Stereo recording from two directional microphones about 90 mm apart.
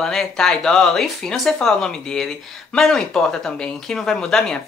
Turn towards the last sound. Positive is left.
turn(degrees=5)  # may be behind; listen again after turning